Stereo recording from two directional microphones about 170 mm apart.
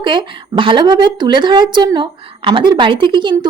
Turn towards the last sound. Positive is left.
turn(degrees=-25)  # may be behind; listen again after turning